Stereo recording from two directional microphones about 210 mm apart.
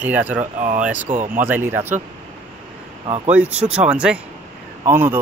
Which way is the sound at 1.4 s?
10° right (ahead or behind).